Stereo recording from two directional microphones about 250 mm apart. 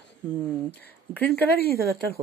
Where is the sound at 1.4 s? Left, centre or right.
Right.